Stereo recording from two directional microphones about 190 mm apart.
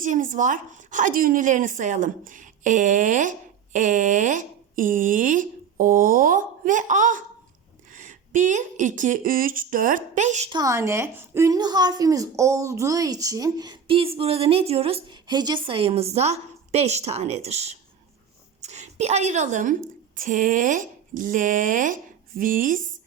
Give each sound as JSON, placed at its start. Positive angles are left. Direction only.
{"t": 0.0, "sound": "speech", "side_deg": -45}
{"t": 10.5, "sound": "a woman's voice", "side_deg": -15}